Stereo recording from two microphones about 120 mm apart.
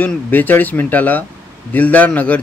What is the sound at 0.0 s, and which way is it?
A man's voice, 15° left (ahead or behind).